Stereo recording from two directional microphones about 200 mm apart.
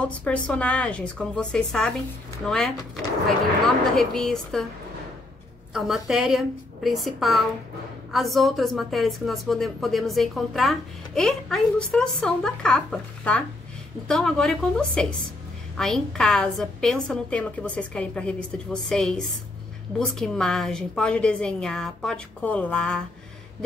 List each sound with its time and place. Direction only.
0.0 s a woman's voice: 5° left (ahead or behind)
5.7 s a woman's voice: centre (ahead or behind)